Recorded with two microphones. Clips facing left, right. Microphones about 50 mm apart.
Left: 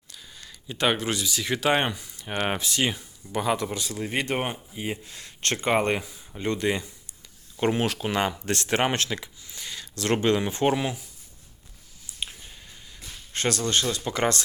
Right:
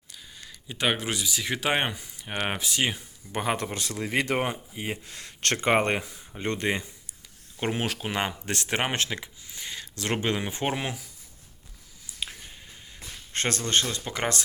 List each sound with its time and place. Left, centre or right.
0.1 s speech: centre
3.3 s speech: right
7.6 s speech: centre
13.3 s speech: right
13.8 s speech: centre